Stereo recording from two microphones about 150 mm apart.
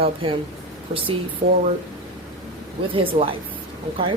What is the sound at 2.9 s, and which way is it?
Speech, 35° right (ahead or behind).